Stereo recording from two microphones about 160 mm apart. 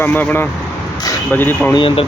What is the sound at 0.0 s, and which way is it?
Speech, 10° left (ahead or behind).